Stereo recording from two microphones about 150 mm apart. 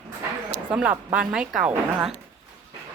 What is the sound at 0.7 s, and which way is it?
A woman's voice, 10° right (ahead or behind).